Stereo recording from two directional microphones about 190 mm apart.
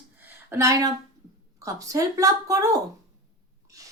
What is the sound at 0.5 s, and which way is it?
Speech, 15° right (ahead or behind).